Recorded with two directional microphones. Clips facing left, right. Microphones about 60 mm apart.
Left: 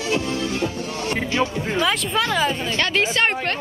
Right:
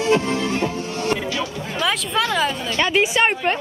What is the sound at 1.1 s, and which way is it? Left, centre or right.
Music, left.